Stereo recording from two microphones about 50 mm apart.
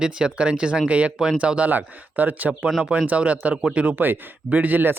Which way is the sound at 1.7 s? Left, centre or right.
Right.